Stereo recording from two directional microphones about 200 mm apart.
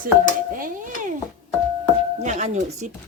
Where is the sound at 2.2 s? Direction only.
35° right (ahead or behind).